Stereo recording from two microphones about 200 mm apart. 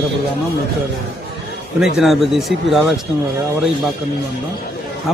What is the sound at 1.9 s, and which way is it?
Speech, centre (ahead or behind).